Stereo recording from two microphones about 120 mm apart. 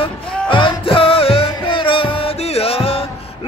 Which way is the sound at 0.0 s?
45° left (ahead or behind).